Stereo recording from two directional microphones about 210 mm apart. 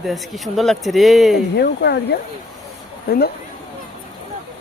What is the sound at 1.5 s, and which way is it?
Speech, 50° left (ahead or behind).